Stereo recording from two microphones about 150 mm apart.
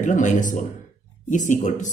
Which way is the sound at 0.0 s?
55° left (ahead or behind).